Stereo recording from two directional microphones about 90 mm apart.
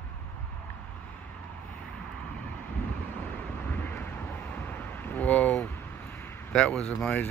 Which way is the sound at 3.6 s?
20° left (ahead or behind).